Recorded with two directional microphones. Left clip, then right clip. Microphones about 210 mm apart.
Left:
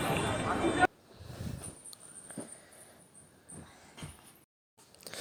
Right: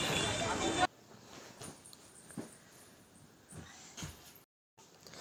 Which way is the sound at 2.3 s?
30° left (ahead or behind).